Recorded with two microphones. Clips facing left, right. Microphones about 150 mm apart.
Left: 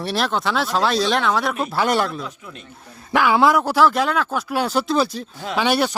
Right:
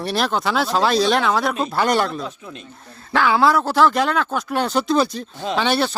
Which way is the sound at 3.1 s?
15° left (ahead or behind).